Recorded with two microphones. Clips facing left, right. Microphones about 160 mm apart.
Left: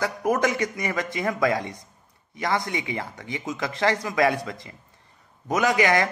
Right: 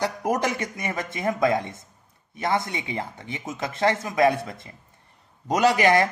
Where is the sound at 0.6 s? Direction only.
25° right (ahead or behind).